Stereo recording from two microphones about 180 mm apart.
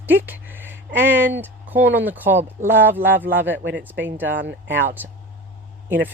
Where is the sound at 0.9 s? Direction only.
70° right (ahead or behind).